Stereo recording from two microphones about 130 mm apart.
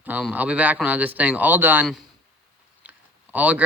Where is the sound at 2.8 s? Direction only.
10° right (ahead or behind).